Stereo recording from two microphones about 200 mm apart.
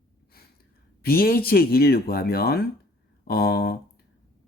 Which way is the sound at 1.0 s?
50° left (ahead or behind).